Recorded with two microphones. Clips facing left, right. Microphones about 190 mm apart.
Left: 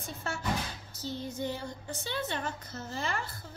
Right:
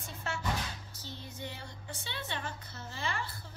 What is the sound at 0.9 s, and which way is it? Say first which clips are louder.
A woman's voice: left 9 dB; 40° left (ahead or behind).